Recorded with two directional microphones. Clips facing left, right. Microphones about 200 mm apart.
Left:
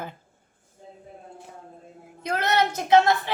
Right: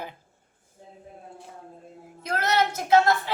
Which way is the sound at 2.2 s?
20° left (ahead or behind).